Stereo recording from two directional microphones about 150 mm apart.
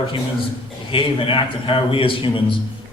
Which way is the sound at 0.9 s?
35° left (ahead or behind).